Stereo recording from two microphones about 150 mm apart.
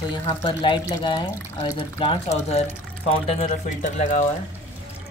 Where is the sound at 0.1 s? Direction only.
35° left (ahead or behind); by 4.3 s 55° left (ahead or behind).